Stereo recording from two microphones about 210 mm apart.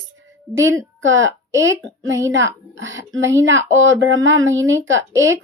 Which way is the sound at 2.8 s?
65° right (ahead or behind).